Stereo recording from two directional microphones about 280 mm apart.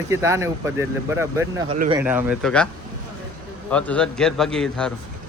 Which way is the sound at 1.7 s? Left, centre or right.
Right.